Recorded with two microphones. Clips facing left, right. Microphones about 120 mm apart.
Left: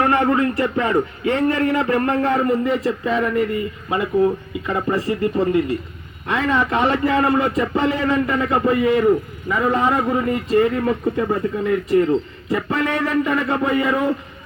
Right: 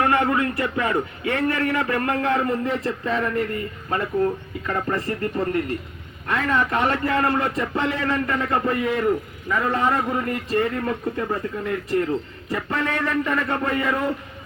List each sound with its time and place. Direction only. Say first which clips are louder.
0.0 s speech: left 3 dB; 30° left (ahead or behind)
2.3 s a man's voice: left 4 dB; 5° left (ahead or behind)
12.5 s a man's voice: left 4 dB; 10° left (ahead or behind)